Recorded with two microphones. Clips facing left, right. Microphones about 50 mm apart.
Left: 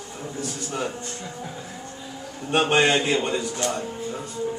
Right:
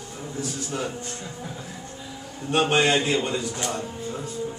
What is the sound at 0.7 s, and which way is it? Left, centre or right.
Speech, centre.